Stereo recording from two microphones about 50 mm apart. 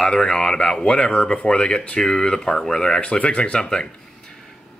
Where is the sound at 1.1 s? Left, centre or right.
Left.